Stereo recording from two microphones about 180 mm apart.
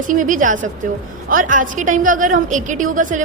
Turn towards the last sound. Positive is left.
turn(degrees=-45)  # may be behind; listen again after turning